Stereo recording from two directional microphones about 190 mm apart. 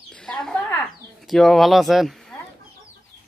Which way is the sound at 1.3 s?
Centre (ahead or behind).